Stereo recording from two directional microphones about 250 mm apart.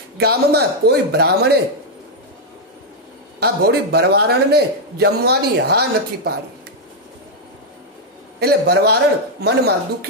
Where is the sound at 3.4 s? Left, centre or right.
Right.